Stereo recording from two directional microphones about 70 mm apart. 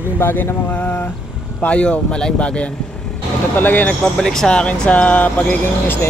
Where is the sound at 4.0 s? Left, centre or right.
Centre.